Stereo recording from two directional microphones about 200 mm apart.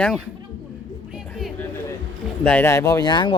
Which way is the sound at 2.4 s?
10° left (ahead or behind).